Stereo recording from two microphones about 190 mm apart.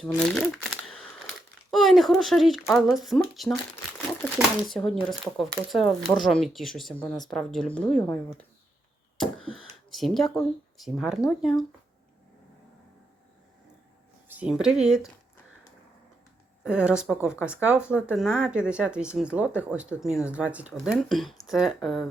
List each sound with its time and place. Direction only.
0.0 s crumpling: centre (ahead or behind)
1.7 s speech: centre (ahead or behind)
9.4 s a sound: 90° right
9.9 s speech: centre (ahead or behind)
14.3 s speech: 5° right (ahead or behind)
16.6 s speech: 5° right (ahead or behind)